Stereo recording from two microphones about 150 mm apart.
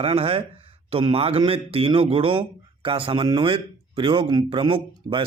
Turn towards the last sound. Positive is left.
turn(degrees=-35)  # may be behind; listen again after turning